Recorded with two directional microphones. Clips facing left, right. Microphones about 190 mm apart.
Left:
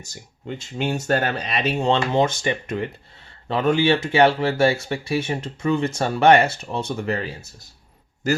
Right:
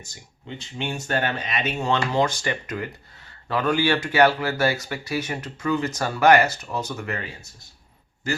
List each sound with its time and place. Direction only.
0.4 s speech: 40° left (ahead or behind)